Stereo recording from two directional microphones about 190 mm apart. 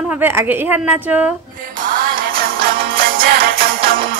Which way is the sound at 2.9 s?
50° right (ahead or behind).